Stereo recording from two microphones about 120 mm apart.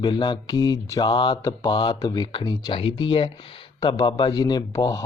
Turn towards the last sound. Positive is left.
turn(degrees=30)  # may be behind; listen again after turning